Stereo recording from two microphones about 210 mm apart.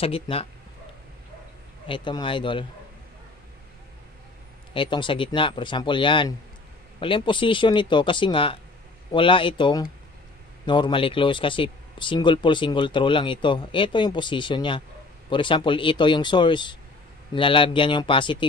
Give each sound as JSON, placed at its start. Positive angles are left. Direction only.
{"t": 0.0, "sound": "speech", "side_deg": 25}
{"t": 1.9, "sound": "speech", "side_deg": 25}
{"t": 4.7, "sound": "speech", "side_deg": 25}